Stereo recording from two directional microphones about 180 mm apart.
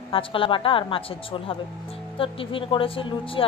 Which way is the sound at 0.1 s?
30° left (ahead or behind).